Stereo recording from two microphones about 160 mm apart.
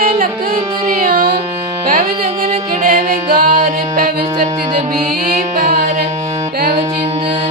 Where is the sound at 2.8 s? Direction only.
65° right (ahead or behind).